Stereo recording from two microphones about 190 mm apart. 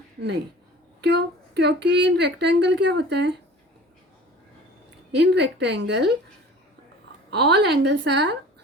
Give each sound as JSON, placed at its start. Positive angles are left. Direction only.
{"t": 1.0, "sound": "a woman's voice", "side_deg": -65}
{"t": 5.1, "sound": "a woman's voice", "side_deg": -65}
{"t": 7.3, "sound": "a woman's voice", "side_deg": -60}